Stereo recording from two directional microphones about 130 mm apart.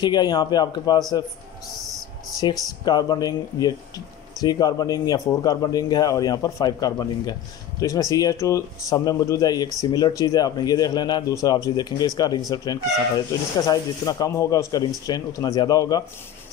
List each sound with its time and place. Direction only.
0.0 s a man's voice: 35° left (ahead or behind)
2.4 s a man's voice: 35° left (ahead or behind)